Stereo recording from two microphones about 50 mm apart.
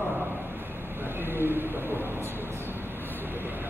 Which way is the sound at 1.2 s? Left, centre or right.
Right.